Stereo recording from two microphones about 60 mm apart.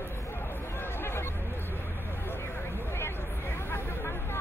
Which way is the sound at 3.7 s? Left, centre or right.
Left.